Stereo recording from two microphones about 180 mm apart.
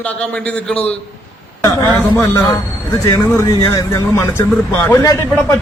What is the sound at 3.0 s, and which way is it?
A man's voice, 15° left (ahead or behind).